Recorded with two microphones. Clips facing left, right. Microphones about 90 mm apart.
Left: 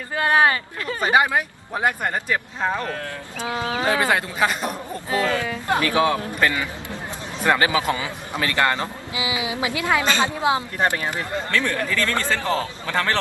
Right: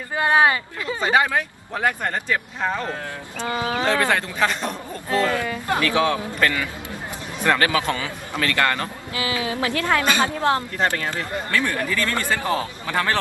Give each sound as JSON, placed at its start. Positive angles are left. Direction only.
{"t": 0.2, "sound": "a man's voice", "side_deg": -15}
{"t": 1.0, "sound": "a man's voice", "side_deg": 15}
{"t": 5.3, "sound": "speech", "side_deg": -5}
{"t": 5.6, "sound": "a man's voice", "side_deg": 20}
{"t": 11.5, "sound": "a man's voice", "side_deg": -15}